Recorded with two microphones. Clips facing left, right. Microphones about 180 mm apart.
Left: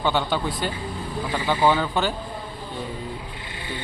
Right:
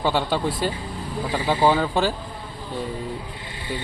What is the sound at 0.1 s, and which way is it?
Speech, centre (ahead or behind).